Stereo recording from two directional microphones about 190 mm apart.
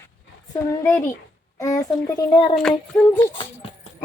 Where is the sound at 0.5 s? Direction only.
15° left (ahead or behind).